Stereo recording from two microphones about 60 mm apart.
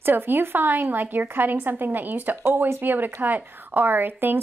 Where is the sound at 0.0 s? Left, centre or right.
Right.